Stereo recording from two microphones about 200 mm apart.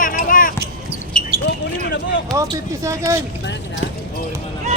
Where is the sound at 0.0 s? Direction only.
45° left (ahead or behind).